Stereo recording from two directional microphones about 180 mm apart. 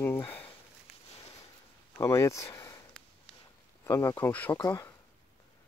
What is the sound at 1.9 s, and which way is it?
Speech, 15° left (ahead or behind).